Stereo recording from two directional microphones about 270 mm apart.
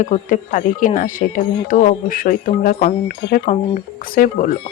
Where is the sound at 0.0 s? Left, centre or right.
Left.